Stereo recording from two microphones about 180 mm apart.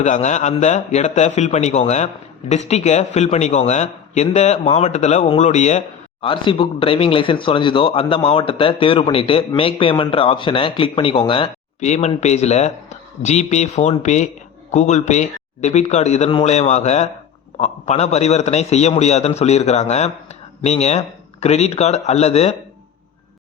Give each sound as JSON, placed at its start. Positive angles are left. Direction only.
{"t": 0.0, "sound": "a man's voice", "side_deg": 40}
{"t": 6.2, "sound": "a man's voice", "side_deg": 30}